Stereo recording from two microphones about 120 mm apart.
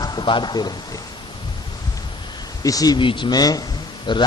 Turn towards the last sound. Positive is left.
turn(degrees=40)  # may be behind; listen again after turning